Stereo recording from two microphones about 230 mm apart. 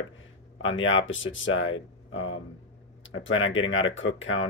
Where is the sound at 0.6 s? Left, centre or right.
Left.